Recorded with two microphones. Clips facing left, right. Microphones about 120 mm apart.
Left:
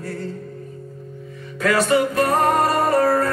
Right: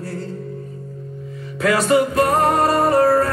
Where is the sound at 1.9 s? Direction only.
40° right (ahead or behind).